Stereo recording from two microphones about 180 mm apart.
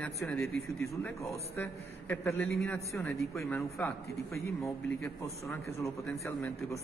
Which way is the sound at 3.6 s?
15° left (ahead or behind).